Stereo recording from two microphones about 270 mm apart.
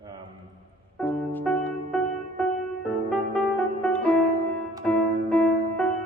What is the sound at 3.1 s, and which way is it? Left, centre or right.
Music, centre.